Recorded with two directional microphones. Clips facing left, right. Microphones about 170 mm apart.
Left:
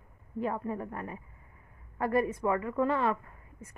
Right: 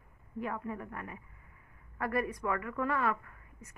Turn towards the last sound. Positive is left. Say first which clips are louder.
# left 3 dB
turn(degrees=25)  # may be behind; listen again after turning